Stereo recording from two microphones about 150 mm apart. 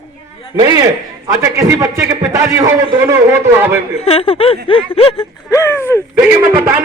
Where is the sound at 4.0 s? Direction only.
40° left (ahead or behind).